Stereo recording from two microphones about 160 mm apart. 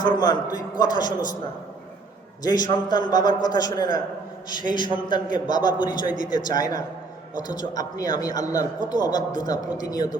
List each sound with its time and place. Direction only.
0.0 s a man's voice: 25° left (ahead or behind)
2.4 s a man's voice: 25° left (ahead or behind)